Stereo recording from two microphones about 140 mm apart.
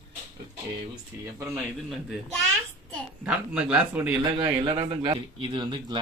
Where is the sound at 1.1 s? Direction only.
15° right (ahead or behind).